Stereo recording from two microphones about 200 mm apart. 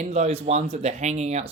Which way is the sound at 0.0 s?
35° right (ahead or behind).